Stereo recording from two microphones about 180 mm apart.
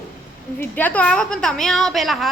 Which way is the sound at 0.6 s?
10° left (ahead or behind).